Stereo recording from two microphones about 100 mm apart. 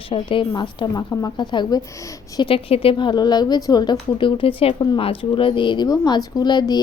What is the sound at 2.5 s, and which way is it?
A woman's voice, 70° left (ahead or behind).